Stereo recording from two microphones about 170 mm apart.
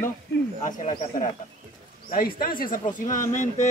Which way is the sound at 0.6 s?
45° left (ahead or behind).